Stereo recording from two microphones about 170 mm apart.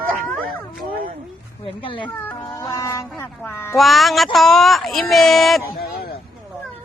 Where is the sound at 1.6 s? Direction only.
30° left (ahead or behind).